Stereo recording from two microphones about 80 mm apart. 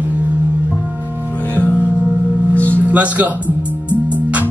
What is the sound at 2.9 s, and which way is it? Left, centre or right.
Music, centre.